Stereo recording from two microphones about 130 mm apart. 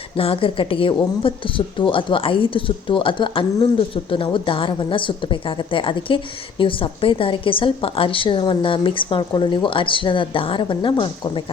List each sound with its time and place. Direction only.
0.2 s a woman's voice: 45° left (ahead or behind)